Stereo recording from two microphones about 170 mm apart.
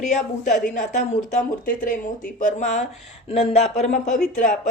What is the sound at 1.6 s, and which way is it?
Speech, 55° left (ahead or behind).